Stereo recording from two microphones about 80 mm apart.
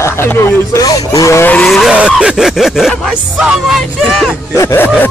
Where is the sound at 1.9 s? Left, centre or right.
Centre.